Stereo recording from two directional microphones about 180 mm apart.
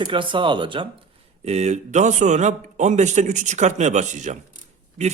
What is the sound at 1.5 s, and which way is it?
A man's voice, 35° right (ahead or behind).